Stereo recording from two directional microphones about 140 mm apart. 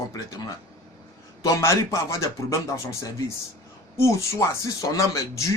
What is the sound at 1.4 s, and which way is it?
A man's voice, 25° left (ahead or behind).